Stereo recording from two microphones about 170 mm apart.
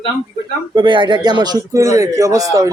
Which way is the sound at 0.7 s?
30° right (ahead or behind).